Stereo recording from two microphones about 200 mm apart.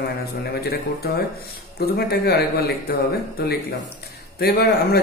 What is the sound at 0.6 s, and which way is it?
Speech, 50° left (ahead or behind).